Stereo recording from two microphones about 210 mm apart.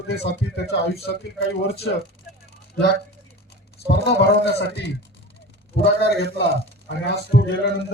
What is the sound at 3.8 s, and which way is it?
A man's voice, 50° left (ahead or behind).